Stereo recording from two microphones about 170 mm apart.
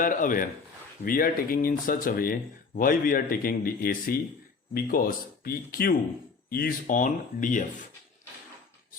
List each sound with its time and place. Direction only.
0.0 s speech: 50° left (ahead or behind)